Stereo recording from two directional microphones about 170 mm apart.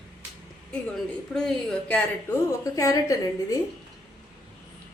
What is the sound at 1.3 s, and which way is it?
Speech, 5° left (ahead or behind).